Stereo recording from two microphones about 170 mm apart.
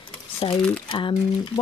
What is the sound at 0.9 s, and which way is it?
Speech, 30° left (ahead or behind).